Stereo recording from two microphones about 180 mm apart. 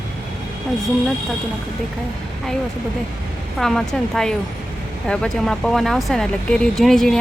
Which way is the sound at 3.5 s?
Centre (ahead or behind).